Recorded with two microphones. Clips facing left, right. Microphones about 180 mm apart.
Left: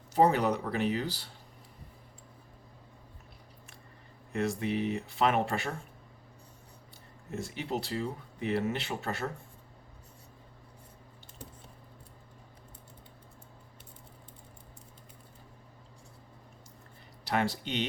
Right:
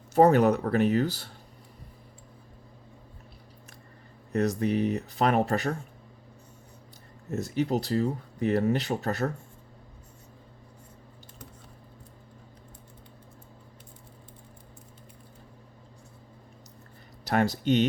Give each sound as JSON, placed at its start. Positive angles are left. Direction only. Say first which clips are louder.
{"t": 0.1, "sound": "speech", "louder": "right 6 dB", "side_deg": -50}
{"t": 4.3, "sound": "speech", "louder": "right 5 dB", "side_deg": -40}
{"t": 7.3, "sound": "speech", "louder": "right 8 dB", "side_deg": -40}
{"t": 17.2, "sound": "speech", "louder": "right 6 dB", "side_deg": -45}